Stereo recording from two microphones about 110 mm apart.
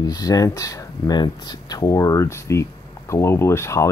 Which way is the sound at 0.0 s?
35° left (ahead or behind).